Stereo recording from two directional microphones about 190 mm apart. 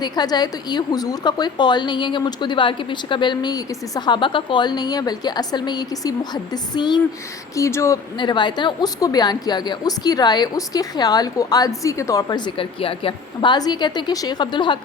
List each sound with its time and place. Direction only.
0.0 s a woman's voice: 20° left (ahead or behind)